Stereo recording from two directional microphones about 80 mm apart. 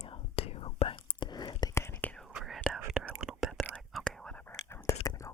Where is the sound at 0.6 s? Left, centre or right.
Left.